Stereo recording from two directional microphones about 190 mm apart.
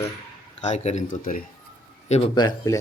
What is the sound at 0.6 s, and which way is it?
Speech, 35° left (ahead or behind).